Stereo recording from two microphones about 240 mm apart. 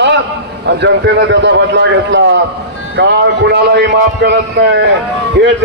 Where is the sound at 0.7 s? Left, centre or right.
Right.